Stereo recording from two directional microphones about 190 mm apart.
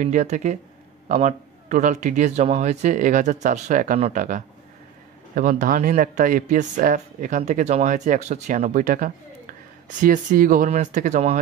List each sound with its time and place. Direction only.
0.0 s speech: 40° right (ahead or behind)